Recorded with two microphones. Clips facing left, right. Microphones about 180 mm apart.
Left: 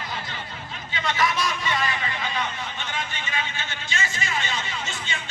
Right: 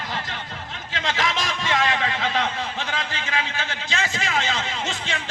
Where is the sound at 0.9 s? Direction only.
90° right.